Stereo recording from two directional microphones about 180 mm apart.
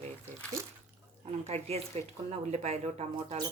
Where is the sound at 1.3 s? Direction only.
35° right (ahead or behind).